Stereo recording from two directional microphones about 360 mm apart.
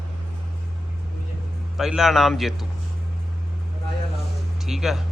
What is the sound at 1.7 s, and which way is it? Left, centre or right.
Speech, centre.